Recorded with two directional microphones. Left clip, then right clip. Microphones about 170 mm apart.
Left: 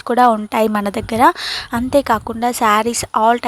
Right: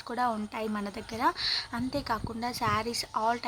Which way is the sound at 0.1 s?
55° left (ahead or behind).